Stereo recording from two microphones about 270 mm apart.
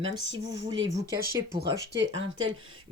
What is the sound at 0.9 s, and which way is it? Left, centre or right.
Speech, centre.